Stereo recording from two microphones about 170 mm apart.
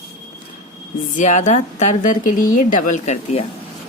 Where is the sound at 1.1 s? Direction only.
45° left (ahead or behind).